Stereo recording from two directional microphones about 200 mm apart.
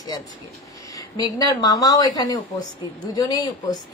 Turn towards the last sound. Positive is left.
turn(degrees=20)  # may be behind; listen again after turning